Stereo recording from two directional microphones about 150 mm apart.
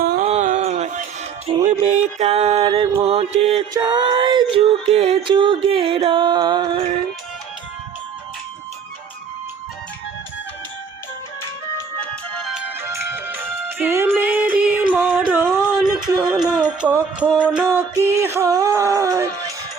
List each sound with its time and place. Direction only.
0.2 s a sound: 50° right (ahead or behind)
1.5 s music: 30° right (ahead or behind)
1.8 s music: 45° right (ahead or behind)
2.6 s music: 30° right (ahead or behind)
3.8 s music: 30° right (ahead or behind)
4.9 s music: 40° right (ahead or behind)
11.9 s music: centre (ahead or behind)
12.8 s music: 15° right (ahead or behind)
15.4 s a sound: centre (ahead or behind)
16.8 s music: 10° right (ahead or behind)